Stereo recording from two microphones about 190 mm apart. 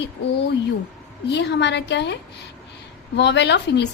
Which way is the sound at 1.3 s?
65° left (ahead or behind).